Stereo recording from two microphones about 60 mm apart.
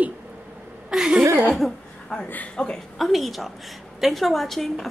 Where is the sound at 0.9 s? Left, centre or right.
Centre.